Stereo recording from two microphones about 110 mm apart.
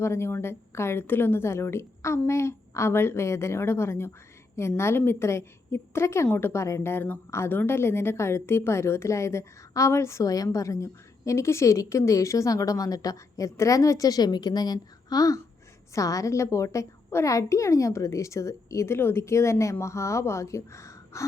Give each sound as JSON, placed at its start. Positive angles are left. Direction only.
{"t": 0.0, "sound": "a woman's voice", "side_deg": 25}